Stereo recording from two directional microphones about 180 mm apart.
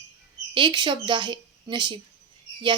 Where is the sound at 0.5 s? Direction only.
25° right (ahead or behind).